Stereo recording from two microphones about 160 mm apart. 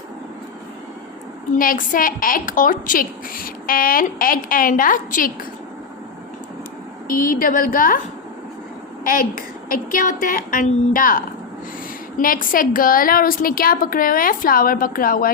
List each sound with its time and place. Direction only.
1.5 s a woman's voice: 60° left (ahead or behind)
7.1 s a woman's voice: 60° left (ahead or behind)
9.0 s a woman's voice: 60° left (ahead or behind)